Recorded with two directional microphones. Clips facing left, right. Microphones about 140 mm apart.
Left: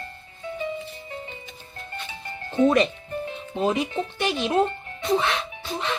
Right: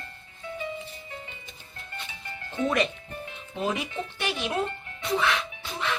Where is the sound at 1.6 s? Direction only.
35° left (ahead or behind).